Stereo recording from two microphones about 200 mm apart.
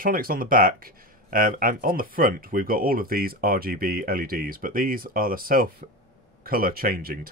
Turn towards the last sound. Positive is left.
turn(degrees=-50)  # may be behind; listen again after turning